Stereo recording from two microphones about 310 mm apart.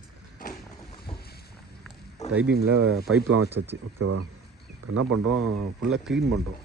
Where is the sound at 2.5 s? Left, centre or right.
Right.